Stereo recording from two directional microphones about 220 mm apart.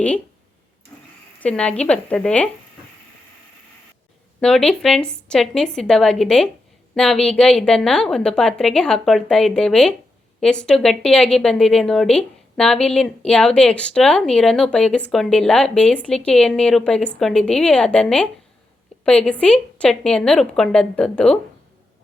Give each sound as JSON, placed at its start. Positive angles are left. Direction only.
{"t": 1.4, "sound": "speech", "side_deg": 5}
{"t": 4.4, "sound": "speech", "side_deg": 5}